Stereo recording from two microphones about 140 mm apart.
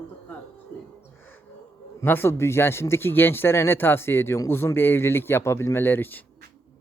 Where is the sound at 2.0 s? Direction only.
15° left (ahead or behind).